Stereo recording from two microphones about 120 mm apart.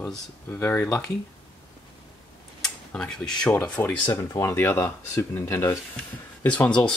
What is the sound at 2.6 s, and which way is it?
Speech, 5° left (ahead or behind).